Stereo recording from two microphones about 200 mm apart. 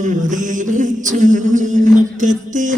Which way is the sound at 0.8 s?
40° right (ahead or behind).